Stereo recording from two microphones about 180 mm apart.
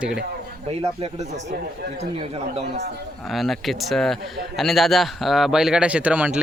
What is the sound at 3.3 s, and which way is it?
Speech, centre (ahead or behind).